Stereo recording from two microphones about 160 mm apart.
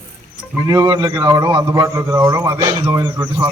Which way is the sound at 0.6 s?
25° right (ahead or behind).